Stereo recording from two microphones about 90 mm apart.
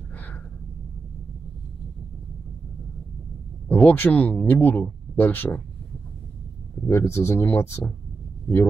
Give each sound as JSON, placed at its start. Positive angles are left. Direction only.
{"t": 3.6, "sound": "speech", "side_deg": 20}
{"t": 6.9, "sound": "speech", "side_deg": 30}